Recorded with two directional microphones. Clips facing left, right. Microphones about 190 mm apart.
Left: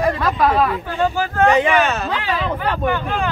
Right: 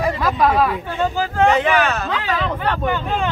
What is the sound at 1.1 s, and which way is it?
Speech, 15° right (ahead or behind).